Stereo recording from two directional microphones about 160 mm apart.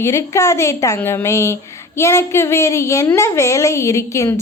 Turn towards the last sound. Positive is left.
turn(degrees=20)  # may be behind; listen again after turning